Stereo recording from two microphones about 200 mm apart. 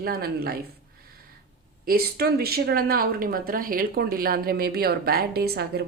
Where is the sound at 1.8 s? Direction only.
50° right (ahead or behind).